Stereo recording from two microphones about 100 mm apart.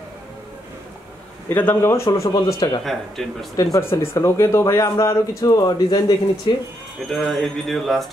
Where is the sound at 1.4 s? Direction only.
20° left (ahead or behind).